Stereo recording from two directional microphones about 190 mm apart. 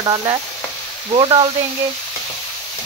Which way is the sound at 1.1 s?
25° right (ahead or behind).